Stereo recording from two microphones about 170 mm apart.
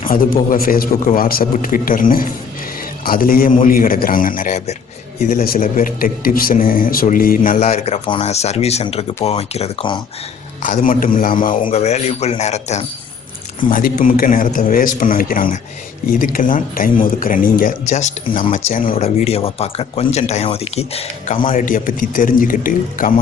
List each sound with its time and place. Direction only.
0.0 s a man's voice: 55° left (ahead or behind)
5.3 s a man's voice: 55° left (ahead or behind)
7.6 s speech: 40° left (ahead or behind)
10.6 s speech: 50° left (ahead or behind)
11.6 s speech: 40° left (ahead or behind)
13.7 s a man's voice: 55° left (ahead or behind)
18.9 s speech: 35° left (ahead or behind)
21.4 s speech: 50° left (ahead or behind)